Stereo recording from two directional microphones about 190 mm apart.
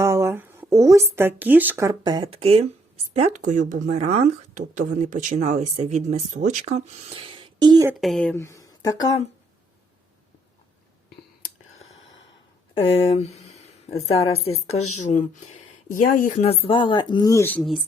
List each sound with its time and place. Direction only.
0.0 s a sound: 15° right (ahead or behind)
1.4 s speech: 10° right (ahead or behind)
7.9 s speech: centre (ahead or behind); by 9.0 s 20° left (ahead or behind)
12.8 s speech: 30° left (ahead or behind); by 17.6 s 15° left (ahead or behind)